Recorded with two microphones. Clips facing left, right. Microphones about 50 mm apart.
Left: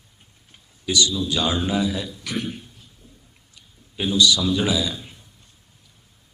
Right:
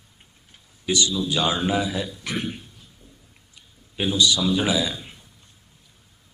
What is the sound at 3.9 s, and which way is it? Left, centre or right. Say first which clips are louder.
Speech: left 1 dB; centre.